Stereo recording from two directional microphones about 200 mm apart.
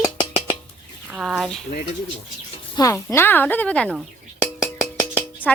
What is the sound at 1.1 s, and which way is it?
Speech, centre (ahead or behind).